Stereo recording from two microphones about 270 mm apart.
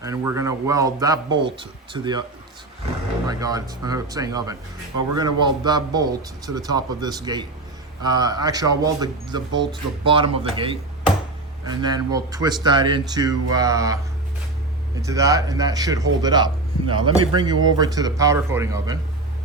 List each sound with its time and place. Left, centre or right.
0.0 s speech: centre
3.2 s speech: centre
15.0 s speech: centre